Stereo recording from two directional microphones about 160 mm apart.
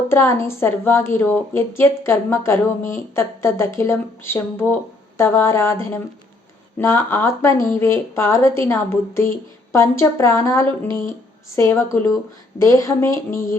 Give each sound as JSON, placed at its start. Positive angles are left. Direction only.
{"t": 0.1, "sound": "a woman's voice", "side_deg": 15}